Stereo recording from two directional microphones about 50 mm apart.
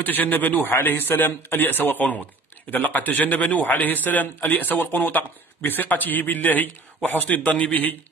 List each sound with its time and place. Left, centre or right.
0.0 s a man's voice: left